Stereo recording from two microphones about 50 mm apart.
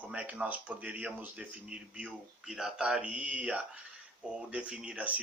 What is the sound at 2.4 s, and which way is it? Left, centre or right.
Speech, centre.